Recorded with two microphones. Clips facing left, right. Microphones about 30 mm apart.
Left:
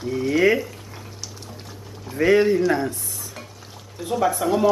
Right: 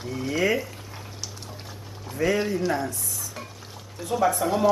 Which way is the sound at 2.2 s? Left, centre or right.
Left.